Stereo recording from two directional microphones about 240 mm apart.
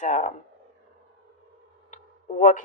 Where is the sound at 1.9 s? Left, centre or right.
Left.